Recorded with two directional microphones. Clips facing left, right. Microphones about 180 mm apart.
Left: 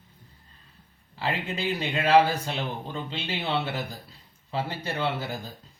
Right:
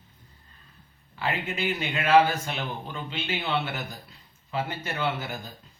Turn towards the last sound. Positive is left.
turn(degrees=35)  # may be behind; listen again after turning